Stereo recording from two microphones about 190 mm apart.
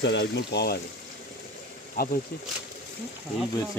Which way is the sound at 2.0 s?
50° left (ahead or behind).